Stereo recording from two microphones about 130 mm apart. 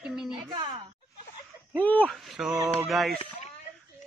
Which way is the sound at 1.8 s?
10° left (ahead or behind).